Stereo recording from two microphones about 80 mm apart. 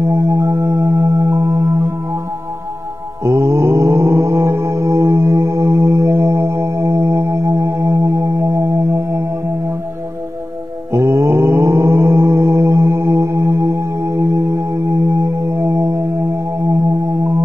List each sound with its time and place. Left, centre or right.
0.1 s music: right
3.3 s mantra: right
4.6 s music: right
10.9 s mantra: right
14.5 s music: right